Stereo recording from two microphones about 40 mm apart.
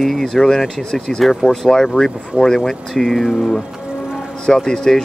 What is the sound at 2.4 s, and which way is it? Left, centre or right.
Speech, centre.